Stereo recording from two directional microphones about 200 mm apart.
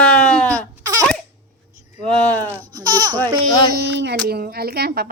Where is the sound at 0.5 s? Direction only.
15° right (ahead or behind).